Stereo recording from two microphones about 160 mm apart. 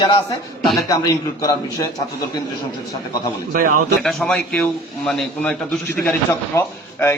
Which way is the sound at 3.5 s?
60° right (ahead or behind).